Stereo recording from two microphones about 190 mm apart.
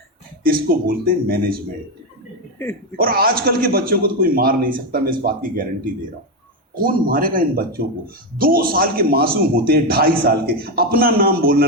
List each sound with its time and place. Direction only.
0.4 s a man's voice: 50° right (ahead or behind)
2.9 s a man's voice: 50° right (ahead or behind)